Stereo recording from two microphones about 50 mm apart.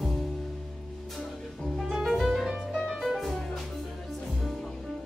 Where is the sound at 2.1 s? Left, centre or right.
Centre.